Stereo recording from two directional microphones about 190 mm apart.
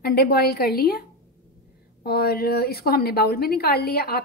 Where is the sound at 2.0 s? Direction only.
55° left (ahead or behind).